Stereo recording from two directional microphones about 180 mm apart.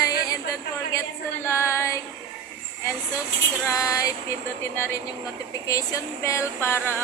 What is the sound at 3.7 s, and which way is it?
Female singing, 20° left (ahead or behind).